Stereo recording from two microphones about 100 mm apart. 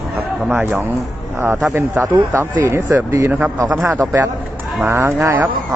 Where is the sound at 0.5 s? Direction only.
25° right (ahead or behind).